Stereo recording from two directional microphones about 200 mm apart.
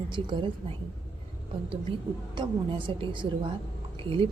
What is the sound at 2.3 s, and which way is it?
A woman's voice, 25° right (ahead or behind).